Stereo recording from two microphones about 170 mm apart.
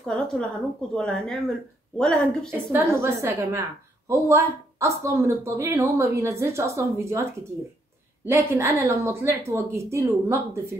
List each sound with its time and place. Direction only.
0.0 s a woman's voice: 5° left (ahead or behind)
2.7 s speech: 15° right (ahead or behind)
8.3 s speech: 15° right (ahead or behind)